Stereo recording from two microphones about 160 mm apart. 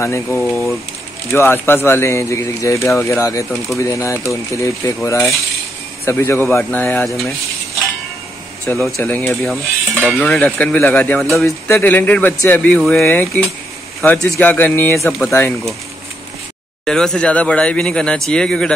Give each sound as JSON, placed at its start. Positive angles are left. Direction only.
{"t": 0.0, "sound": "speech", "side_deg": 15}
{"t": 7.1, "sound": "speech", "side_deg": 0}
{"t": 8.6, "sound": "speech", "side_deg": 0}
{"t": 16.8, "sound": "speech", "side_deg": 5}